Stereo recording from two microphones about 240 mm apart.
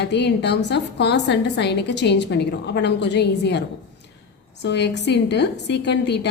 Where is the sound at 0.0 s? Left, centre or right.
Left.